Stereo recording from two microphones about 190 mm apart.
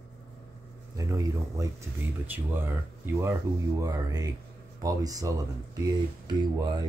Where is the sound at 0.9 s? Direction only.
15° right (ahead or behind).